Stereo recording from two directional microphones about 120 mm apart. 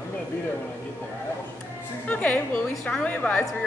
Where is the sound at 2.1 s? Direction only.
15° left (ahead or behind).